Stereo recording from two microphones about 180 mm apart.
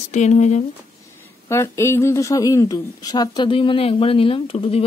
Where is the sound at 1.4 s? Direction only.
15° left (ahead or behind).